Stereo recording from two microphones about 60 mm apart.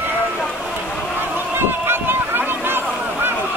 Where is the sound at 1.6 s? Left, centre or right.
Right.